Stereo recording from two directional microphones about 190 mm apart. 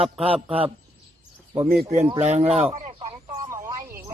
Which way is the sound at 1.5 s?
15° right (ahead or behind).